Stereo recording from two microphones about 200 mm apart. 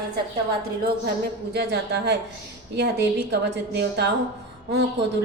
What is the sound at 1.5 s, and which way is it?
A woman's voice, 55° right (ahead or behind).